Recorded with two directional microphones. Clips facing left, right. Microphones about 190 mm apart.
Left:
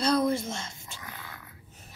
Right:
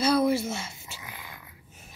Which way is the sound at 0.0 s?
5° right (ahead or behind).